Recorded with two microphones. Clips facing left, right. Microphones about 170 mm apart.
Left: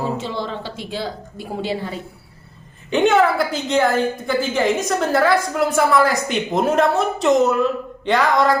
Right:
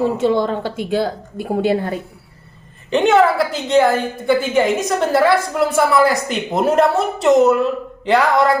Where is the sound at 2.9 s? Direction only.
Centre (ahead or behind).